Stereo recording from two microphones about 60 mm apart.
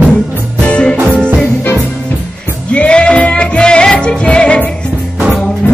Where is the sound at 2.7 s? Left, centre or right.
Centre.